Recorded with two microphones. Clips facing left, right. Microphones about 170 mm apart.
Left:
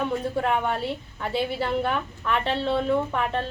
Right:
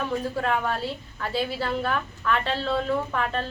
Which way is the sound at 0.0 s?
20° left (ahead or behind).